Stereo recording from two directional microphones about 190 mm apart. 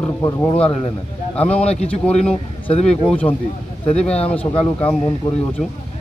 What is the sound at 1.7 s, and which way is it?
Speech, 30° left (ahead or behind).